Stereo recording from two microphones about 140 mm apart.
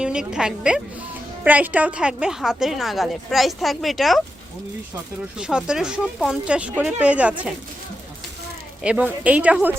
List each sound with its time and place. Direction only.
0.0 s a woman's voice: 5° right (ahead or behind)
5.4 s a woman's voice: 5° right (ahead or behind)
8.8 s speech: 10° right (ahead or behind)